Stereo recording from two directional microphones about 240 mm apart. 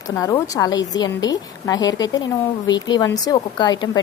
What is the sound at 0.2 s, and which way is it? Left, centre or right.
A woman's voice, centre.